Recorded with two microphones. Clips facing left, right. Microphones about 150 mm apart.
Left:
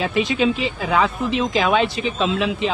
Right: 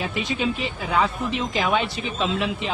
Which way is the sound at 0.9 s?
90° left.